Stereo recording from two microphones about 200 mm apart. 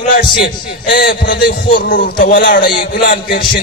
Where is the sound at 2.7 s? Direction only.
55° left (ahead or behind).